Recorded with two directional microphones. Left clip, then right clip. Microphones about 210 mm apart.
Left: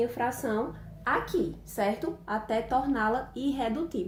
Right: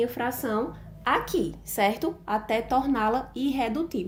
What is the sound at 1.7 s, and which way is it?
A woman's voice, 45° right (ahead or behind).